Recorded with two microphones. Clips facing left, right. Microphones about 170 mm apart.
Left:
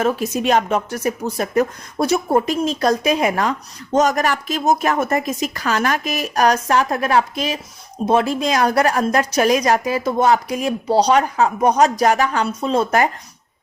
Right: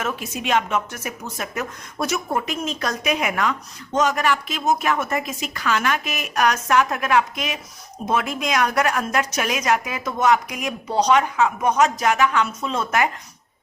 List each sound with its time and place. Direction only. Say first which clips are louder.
0.0 s a woman's voice: left 8 dB; 35° left (ahead or behind)